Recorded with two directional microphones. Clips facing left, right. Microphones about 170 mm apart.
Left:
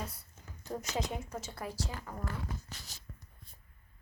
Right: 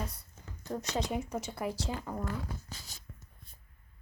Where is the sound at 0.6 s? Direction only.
10° left (ahead or behind).